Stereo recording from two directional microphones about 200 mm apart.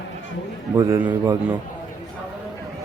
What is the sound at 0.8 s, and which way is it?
Speech, 15° right (ahead or behind).